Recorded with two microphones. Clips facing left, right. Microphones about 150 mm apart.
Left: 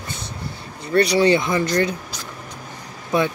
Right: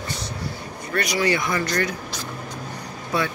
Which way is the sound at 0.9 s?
30° left (ahead or behind).